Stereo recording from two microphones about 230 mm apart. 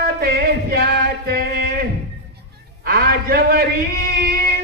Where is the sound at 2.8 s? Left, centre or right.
Right.